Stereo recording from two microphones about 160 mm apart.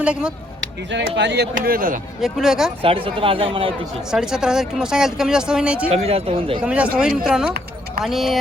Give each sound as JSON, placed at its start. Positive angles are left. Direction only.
{"t": 0.0, "sound": "speech", "side_deg": -5}
{"t": 0.9, "sound": "speech", "side_deg": -90}
{"t": 2.2, "sound": "speech", "side_deg": -5}
{"t": 2.8, "sound": "speech", "side_deg": -35}
{"t": 4.1, "sound": "speech", "side_deg": -5}
{"t": 5.9, "sound": "speech", "side_deg": -40}
{"t": 6.6, "sound": "speech", "side_deg": -10}